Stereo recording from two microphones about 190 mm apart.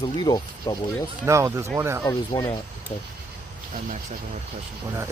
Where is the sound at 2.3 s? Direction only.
20° left (ahead or behind).